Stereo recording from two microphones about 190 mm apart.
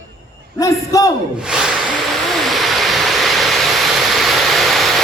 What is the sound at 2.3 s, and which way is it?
Vehicle, centre (ahead or behind).